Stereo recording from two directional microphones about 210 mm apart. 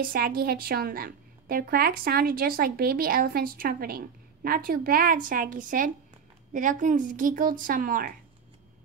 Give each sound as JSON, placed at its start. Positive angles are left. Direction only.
{"t": 0.0, "sound": "a woman's voice", "side_deg": -45}